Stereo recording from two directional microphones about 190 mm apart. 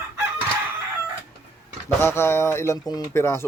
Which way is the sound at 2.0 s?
15° left (ahead or behind).